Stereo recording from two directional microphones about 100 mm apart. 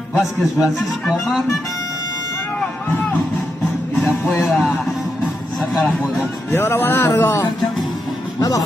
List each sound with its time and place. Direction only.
0.6 s speech: 5° right (ahead or behind)
4.4 s music: centre (ahead or behind)
5.6 s speech: centre (ahead or behind)
6.5 s music: 20° left (ahead or behind)
8.4 s speech: 35° left (ahead or behind)